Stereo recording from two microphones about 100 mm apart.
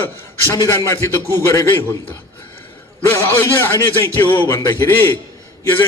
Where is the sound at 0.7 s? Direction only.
25° left (ahead or behind).